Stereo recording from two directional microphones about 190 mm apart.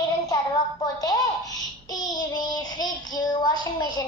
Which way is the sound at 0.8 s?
20° left (ahead or behind).